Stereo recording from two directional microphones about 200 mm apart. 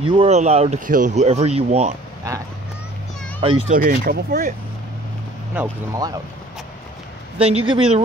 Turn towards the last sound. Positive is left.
turn(degrees=-25)  # may be behind; listen again after turning